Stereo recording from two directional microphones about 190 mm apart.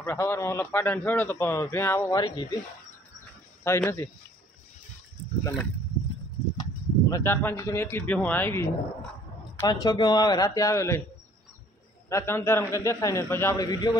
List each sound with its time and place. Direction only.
0.0 s a man's voice: 10° left (ahead or behind)
3.6 s a man's voice: 15° left (ahead or behind)
5.4 s a man's voice: 10° left (ahead or behind)
12.1 s a man's voice: 15° left (ahead or behind)